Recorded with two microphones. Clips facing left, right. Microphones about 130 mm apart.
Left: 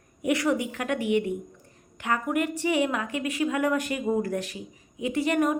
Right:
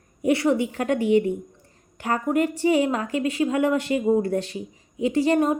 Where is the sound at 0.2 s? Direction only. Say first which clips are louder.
Right 4 dB; 30° right (ahead or behind).